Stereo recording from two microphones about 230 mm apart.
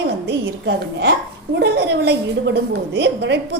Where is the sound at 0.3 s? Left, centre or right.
Right.